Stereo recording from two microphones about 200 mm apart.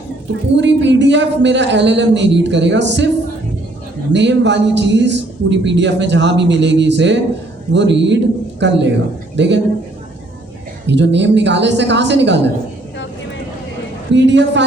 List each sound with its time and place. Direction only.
0.5 s speech: 65° right (ahead or behind)
4.1 s a man's voice: 60° right (ahead or behind)
10.8 s speech: 60° right (ahead or behind)
14.1 s speech: 60° right (ahead or behind)